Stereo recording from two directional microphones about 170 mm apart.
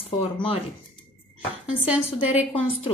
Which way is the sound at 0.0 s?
35° left (ahead or behind).